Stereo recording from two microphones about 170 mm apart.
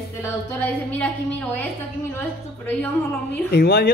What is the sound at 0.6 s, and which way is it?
Speech, 10° left (ahead or behind).